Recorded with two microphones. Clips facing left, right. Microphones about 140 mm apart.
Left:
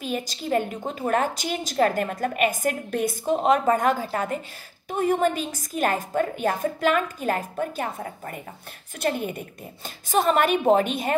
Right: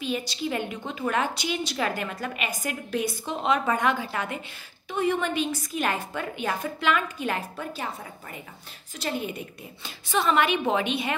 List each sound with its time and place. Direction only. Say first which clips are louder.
0.0 s a woman's voice: even; 45° left (ahead or behind)